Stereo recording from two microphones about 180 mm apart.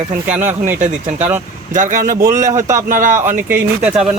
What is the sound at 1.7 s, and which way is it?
Speech, 45° right (ahead or behind).